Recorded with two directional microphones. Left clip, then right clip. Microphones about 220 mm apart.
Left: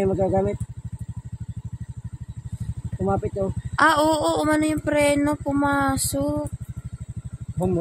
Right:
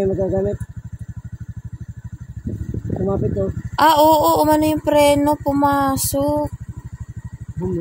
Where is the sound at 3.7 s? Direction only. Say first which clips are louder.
Right 6 dB; 5° right (ahead or behind).